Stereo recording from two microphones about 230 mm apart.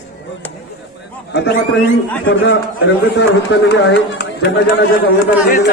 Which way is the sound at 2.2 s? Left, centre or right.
Left.